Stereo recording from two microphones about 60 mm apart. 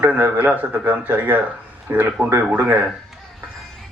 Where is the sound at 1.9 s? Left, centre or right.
Right.